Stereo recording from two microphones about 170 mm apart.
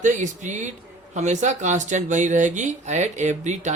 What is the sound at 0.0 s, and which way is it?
Speech, 45° right (ahead or behind).